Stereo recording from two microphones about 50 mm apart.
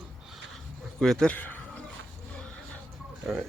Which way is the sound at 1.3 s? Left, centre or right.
Left.